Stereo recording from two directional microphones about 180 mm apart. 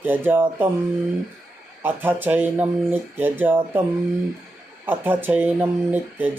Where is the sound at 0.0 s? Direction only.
10° right (ahead or behind).